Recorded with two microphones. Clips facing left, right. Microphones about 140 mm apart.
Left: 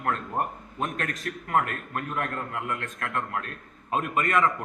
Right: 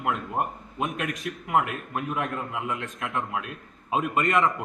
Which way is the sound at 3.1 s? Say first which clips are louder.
Right 1 dB; 5° right (ahead or behind).